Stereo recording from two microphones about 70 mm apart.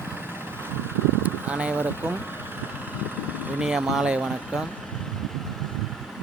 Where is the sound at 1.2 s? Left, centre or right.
Centre.